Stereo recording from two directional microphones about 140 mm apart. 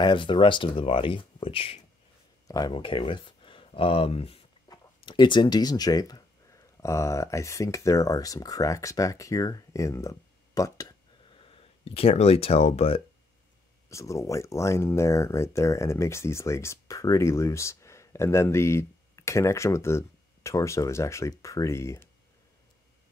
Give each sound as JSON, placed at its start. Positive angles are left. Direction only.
{"t": 0.0, "sound": "speech", "side_deg": 35}
{"t": 2.4, "sound": "speech", "side_deg": 25}
{"t": 2.7, "sound": "speech", "side_deg": 40}
{"t": 4.6, "sound": "speech", "side_deg": 30}
{"t": 13.8, "sound": "speech", "side_deg": 20}